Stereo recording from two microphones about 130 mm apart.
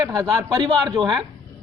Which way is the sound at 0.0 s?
30° right (ahead or behind).